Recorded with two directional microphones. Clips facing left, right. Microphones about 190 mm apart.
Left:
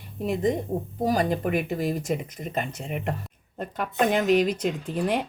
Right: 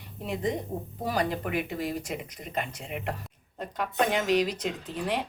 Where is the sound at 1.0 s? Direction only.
45° left (ahead or behind).